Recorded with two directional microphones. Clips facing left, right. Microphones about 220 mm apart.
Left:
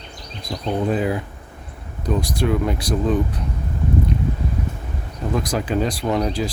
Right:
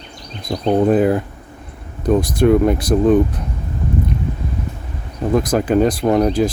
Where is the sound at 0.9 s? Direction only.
50° right (ahead or behind).